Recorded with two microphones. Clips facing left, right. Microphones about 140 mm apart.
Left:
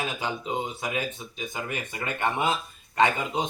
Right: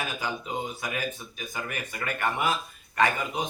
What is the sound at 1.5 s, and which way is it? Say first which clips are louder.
Speech: even; 25° left (ahead or behind).